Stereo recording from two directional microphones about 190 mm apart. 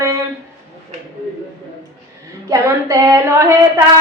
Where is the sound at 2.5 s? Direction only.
15° right (ahead or behind).